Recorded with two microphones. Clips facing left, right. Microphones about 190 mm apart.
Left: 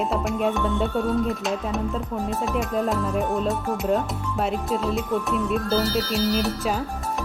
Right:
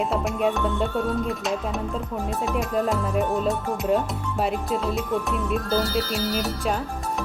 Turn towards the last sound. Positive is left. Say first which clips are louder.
# left 2 dB
turn(degrees=0)  # may be behind; listen again after turning